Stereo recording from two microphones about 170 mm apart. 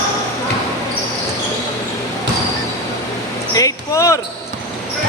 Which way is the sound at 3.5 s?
20° left (ahead or behind).